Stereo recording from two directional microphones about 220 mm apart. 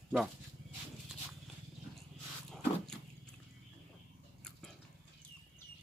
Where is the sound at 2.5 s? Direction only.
5° left (ahead or behind).